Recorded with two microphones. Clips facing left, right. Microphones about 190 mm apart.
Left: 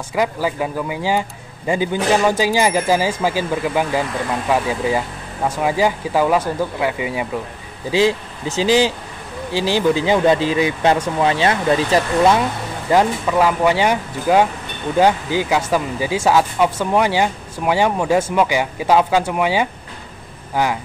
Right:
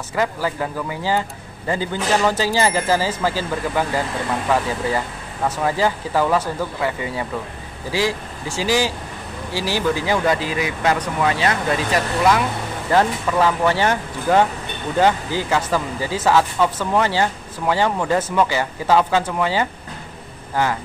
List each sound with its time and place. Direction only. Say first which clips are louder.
0.1 s speech: left 2 dB; 15° left (ahead or behind)
12.9 s speech: left 2 dB; 10° left (ahead or behind)